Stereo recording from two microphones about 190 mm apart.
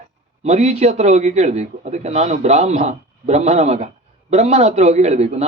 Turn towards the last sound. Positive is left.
turn(degrees=-35)  # may be behind; listen again after turning